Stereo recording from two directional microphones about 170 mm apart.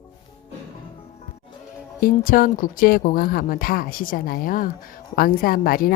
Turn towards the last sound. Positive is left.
turn(degrees=60)  # may be behind; listen again after turning